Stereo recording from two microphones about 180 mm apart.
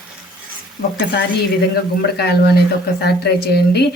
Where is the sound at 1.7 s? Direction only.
65° left (ahead or behind).